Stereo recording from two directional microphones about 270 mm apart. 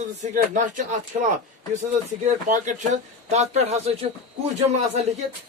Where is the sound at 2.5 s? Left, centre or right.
Right.